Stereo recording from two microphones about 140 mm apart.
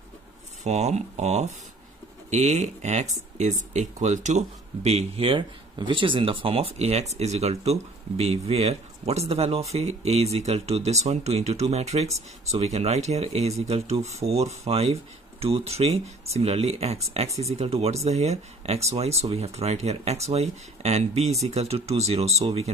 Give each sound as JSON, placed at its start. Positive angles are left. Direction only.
{"t": 0.7, "sound": "speech", "side_deg": -50}